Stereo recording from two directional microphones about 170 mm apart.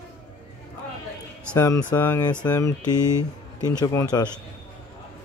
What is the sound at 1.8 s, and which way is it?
Speech, 10° left (ahead or behind).